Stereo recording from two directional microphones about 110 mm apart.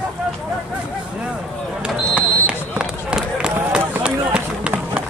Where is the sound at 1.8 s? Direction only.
10° right (ahead or behind).